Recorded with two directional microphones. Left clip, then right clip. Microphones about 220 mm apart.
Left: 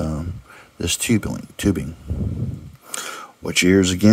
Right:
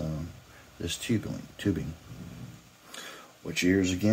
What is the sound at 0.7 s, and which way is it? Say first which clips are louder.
Speech: left 11 dB; 50° left (ahead or behind).